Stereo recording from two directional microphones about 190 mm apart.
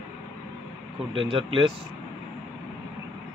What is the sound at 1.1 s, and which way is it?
Speech, 30° right (ahead or behind).